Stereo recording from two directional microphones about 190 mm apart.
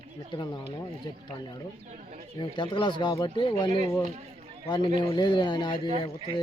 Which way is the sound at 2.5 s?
25° left (ahead or behind).